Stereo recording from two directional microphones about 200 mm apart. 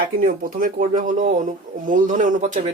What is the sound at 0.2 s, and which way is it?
Speech, 45° right (ahead or behind).